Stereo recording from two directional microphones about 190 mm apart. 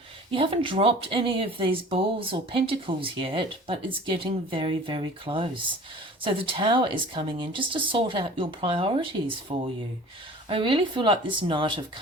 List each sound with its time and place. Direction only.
0.3 s speech: 30° right (ahead or behind)